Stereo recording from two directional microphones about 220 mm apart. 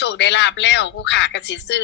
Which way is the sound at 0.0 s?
55° left (ahead or behind).